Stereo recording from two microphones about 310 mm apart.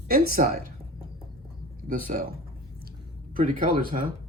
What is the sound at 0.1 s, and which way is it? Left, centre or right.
Speech, right.